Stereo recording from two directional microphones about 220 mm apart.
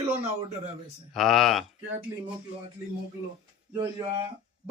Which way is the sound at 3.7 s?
20° right (ahead or behind).